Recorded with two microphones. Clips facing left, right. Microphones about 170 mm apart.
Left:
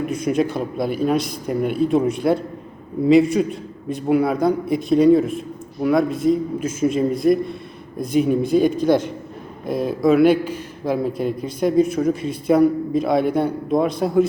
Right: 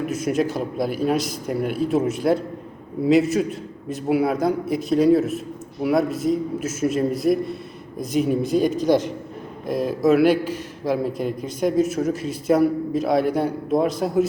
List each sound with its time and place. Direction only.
0.0 s a man's voice: 5° right (ahead or behind)
8.7 s a man's voice: 55° left (ahead or behind)
9.6 s a man's voice: 5° left (ahead or behind)